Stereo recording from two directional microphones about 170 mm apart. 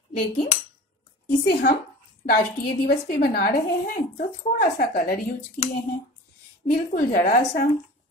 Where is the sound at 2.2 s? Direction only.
65° left (ahead or behind).